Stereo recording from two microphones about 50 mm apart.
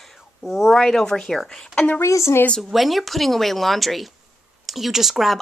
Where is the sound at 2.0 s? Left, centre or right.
Left.